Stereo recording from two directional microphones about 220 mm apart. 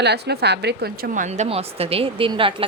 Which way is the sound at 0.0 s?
50° right (ahead or behind).